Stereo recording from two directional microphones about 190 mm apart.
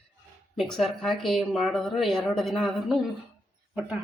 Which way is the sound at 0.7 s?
Centre (ahead or behind).